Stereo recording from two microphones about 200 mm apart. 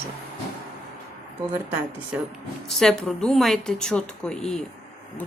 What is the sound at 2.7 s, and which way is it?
A woman's voice, centre (ahead or behind).